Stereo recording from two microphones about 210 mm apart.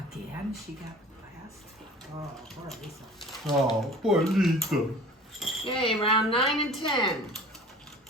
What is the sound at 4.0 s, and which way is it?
Speech, centre (ahead or behind).